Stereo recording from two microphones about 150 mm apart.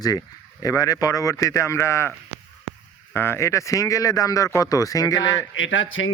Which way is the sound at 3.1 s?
15° left (ahead or behind).